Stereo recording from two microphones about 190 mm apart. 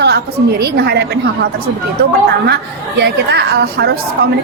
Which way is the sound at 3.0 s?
60° right (ahead or behind).